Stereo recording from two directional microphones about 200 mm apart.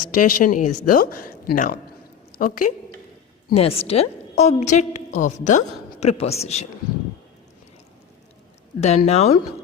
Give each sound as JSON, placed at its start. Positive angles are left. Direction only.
{"t": 0.0, "sound": "speech", "side_deg": 45}
{"t": 3.5, "sound": "a woman's voice", "side_deg": 30}
{"t": 9.0, "sound": "a woman's voice", "side_deg": 30}